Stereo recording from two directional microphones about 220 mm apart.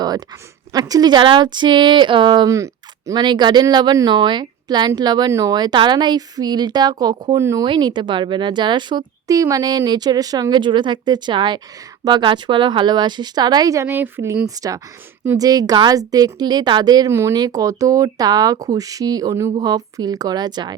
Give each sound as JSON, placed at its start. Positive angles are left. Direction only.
{"t": 0.7, "sound": "a woman's voice", "side_deg": -15}